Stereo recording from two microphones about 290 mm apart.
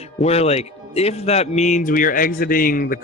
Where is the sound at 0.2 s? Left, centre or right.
Left.